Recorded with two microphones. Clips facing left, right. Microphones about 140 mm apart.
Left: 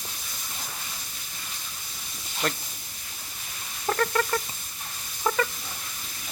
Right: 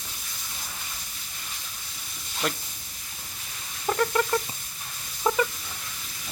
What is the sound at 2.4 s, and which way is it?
Speech, 5° right (ahead or behind).